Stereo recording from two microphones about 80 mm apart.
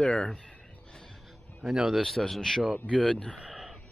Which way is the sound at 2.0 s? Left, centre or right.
Centre.